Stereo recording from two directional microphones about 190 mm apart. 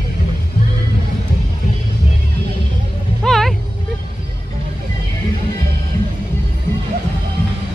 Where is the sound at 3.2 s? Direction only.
Centre (ahead or behind).